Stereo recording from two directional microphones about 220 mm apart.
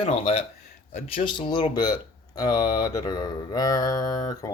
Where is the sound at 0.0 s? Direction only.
30° left (ahead or behind).